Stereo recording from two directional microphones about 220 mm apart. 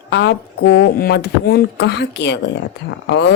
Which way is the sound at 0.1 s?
50° left (ahead or behind).